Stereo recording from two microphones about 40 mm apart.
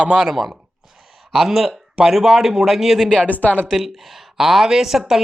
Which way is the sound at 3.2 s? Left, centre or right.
Left.